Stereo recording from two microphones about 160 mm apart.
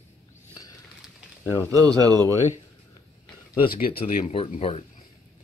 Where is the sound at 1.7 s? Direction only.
25° right (ahead or behind).